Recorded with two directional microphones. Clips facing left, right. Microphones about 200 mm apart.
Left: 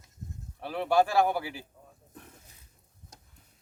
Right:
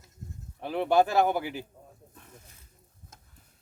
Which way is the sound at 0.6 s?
20° right (ahead or behind).